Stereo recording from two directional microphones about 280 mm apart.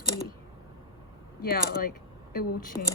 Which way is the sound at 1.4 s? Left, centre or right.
Left.